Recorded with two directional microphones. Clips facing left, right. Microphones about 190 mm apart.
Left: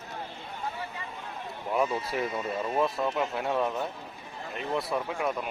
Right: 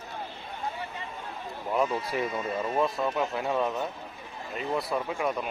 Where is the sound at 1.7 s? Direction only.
Centre (ahead or behind).